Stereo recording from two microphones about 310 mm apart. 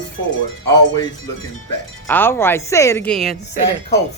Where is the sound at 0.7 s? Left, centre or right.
Centre.